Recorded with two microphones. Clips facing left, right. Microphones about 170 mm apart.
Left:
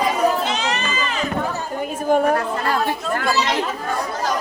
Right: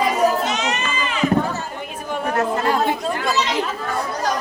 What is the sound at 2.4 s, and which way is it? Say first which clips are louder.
Speech: right 2 dB; 20° right (ahead or behind).